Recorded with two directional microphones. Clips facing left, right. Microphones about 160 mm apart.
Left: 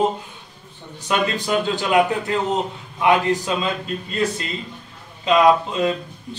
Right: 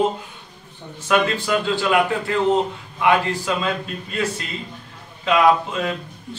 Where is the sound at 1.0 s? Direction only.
20° left (ahead or behind).